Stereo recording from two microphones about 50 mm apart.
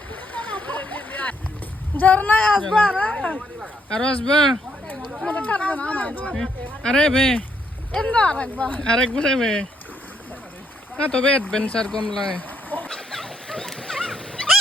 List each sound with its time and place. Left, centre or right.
0.1 s splash: left
2.0 s speech: left; by 4.5 s centre
5.3 s speech: left
6.3 s speech: centre
8.1 s speech: left
10.9 s speech: left
12.9 s dog: centre